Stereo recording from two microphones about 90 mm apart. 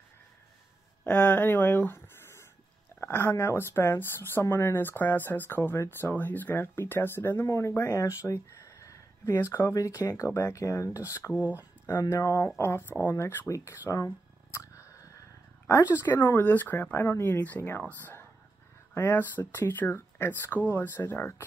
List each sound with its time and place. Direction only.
1.0 s speech: 15° left (ahead or behind); by 8.1 s 35° left (ahead or behind)
8.2 s a sound: 35° left (ahead or behind)
9.3 s speech: 30° left (ahead or behind)
11.3 s speech: 15° right (ahead or behind)
12.1 s speech: 35° left (ahead or behind)
13.5 s a sound: 35° left (ahead or behind)
15.9 s speech: 25° left (ahead or behind)